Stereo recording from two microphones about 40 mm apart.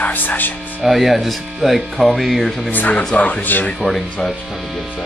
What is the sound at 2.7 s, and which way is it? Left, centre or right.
Speech, left.